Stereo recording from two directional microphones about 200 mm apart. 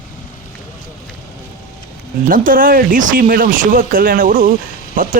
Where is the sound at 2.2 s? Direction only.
45° right (ahead or behind).